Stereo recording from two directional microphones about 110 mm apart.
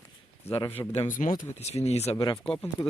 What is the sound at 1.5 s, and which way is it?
Speech, 75° left (ahead or behind).